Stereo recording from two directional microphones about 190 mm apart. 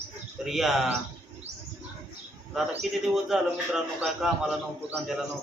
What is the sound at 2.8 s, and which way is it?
A man's voice, centre (ahead or behind).